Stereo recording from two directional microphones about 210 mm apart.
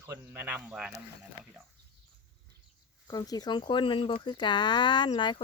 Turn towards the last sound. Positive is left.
turn(degrees=20)  # may be behind; listen again after turning